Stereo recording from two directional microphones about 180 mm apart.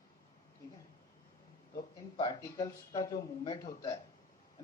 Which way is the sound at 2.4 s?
20° left (ahead or behind).